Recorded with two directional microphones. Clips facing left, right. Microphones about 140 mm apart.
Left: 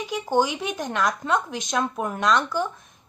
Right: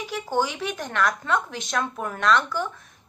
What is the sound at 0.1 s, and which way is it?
A woman's voice, 15° left (ahead or behind).